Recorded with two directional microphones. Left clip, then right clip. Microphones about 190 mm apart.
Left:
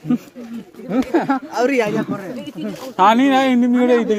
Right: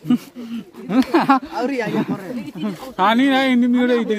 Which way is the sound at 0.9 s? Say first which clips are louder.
Right 3 dB; 55° right (ahead or behind).